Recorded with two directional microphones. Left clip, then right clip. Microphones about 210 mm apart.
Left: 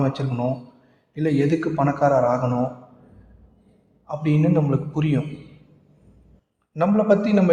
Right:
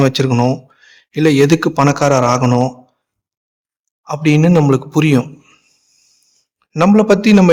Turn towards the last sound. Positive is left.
turn(degrees=-40)  # may be behind; listen again after turning